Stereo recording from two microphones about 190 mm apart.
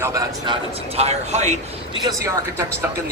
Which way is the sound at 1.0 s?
35° right (ahead or behind).